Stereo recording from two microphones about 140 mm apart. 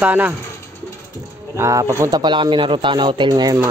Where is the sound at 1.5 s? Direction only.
20° right (ahead or behind).